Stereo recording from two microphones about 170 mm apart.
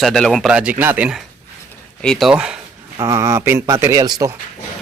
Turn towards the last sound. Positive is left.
turn(degrees=-25)  # may be behind; listen again after turning